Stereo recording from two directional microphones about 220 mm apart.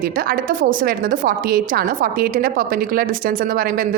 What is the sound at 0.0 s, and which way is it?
A woman's voice, 40° right (ahead or behind).